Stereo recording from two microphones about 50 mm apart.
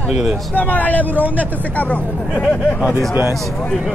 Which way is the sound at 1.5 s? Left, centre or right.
Left.